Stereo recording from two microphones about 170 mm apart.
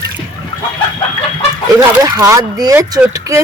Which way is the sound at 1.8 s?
20° right (ahead or behind).